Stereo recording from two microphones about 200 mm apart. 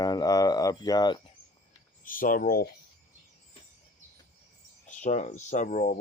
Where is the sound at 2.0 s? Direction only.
45° left (ahead or behind).